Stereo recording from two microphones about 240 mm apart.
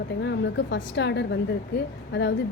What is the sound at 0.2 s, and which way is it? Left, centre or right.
Speech, left.